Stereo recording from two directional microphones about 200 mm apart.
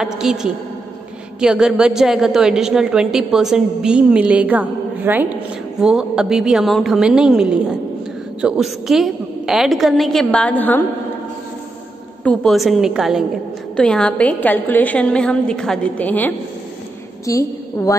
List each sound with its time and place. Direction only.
0.0 s a woman's voice: 5° right (ahead or behind)
12.2 s a woman's voice: 5° left (ahead or behind)